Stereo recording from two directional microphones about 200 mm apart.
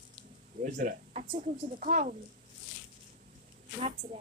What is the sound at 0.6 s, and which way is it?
Speech, 40° right (ahead or behind).